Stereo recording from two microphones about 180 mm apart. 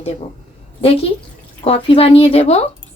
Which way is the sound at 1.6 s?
30° left (ahead or behind).